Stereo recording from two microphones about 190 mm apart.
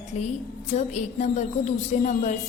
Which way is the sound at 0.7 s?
35° left (ahead or behind).